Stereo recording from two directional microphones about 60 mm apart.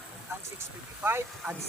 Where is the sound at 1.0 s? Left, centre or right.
Right.